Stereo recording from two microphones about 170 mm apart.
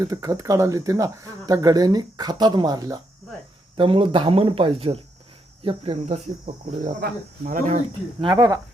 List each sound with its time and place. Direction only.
0.0 s speech: 20° right (ahead or behind); by 6.9 s 40° right (ahead or behind)
7.0 s speech: 55° right (ahead or behind)
8.2 s speech: 25° right (ahead or behind)